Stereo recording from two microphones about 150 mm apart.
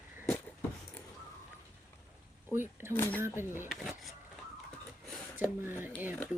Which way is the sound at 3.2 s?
15° right (ahead or behind).